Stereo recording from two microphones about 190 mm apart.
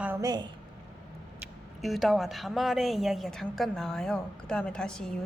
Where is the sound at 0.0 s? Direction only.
15° right (ahead or behind).